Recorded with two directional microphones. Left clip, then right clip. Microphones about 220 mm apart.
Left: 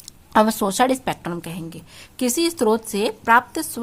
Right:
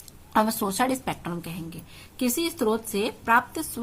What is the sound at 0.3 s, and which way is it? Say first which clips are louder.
A woman's voice: left 6 dB; 35° left (ahead or behind).